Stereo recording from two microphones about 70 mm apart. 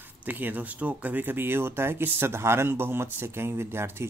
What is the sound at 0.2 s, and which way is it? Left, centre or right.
Speech, right.